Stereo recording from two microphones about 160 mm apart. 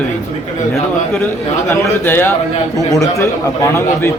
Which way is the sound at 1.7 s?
15° left (ahead or behind).